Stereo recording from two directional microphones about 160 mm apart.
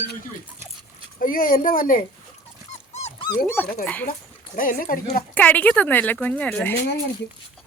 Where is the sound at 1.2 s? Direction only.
60° left (ahead or behind).